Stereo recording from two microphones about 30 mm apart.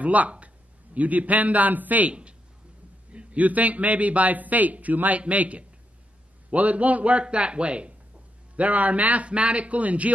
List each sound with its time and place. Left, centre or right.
0.0 s a man's voice: right
2.0 s speech: right
3.1 s a sound: right
3.3 s a man's voice: right
5.3 s a man's voice: right
7.2 s speech: right
8.5 s a man's voice: right
9.3 s speech: right